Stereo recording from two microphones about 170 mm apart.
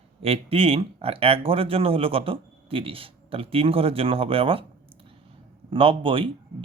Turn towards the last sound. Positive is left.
turn(degrees=-30)  # may be behind; listen again after turning